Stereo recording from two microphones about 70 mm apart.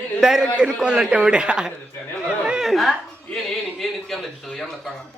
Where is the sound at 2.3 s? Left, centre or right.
Centre.